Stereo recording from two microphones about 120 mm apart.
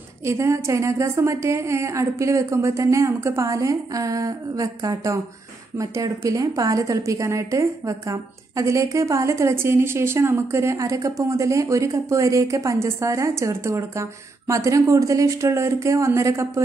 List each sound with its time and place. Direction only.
0.2 s a woman's voice: 25° right (ahead or behind)